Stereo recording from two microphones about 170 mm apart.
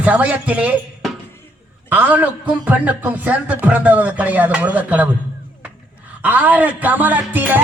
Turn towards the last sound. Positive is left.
turn(degrees=-10)  # may be behind; listen again after turning